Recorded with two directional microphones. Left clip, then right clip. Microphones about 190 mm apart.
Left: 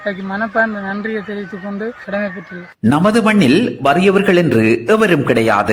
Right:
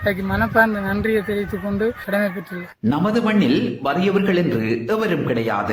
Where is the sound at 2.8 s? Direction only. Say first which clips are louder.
Left 7 dB; 35° left (ahead or behind).